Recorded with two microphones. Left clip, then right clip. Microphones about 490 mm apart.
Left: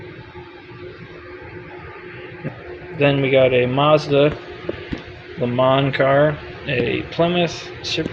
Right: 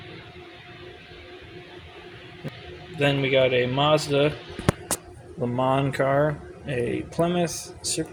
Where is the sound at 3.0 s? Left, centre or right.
Right.